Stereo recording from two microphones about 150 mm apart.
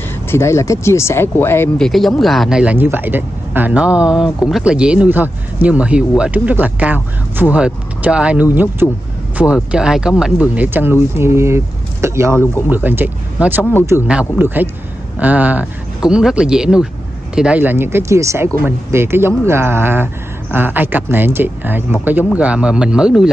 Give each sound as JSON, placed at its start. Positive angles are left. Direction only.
{"t": 0.3, "sound": "speech", "side_deg": 20}
{"t": 1.8, "sound": "speech", "side_deg": 0}
{"t": 8.8, "sound": "speech", "side_deg": 15}
{"t": 9.4, "sound": "speech", "side_deg": -5}